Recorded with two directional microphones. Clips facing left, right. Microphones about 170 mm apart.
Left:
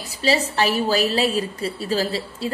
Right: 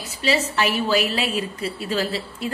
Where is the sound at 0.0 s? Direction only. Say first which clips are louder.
Left 1 dB; 35° left (ahead or behind).